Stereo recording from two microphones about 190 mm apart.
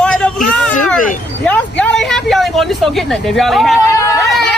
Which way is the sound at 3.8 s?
15° left (ahead or behind).